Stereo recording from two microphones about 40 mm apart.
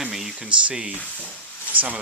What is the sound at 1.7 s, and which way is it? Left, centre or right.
Speech, right.